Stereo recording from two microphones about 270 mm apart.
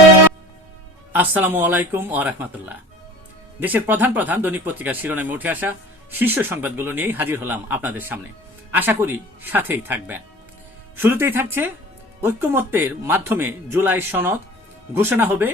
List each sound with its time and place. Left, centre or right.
1.1 s speech: centre
3.6 s speech: centre